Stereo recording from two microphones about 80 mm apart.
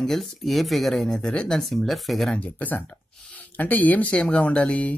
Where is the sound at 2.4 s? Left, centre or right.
Centre.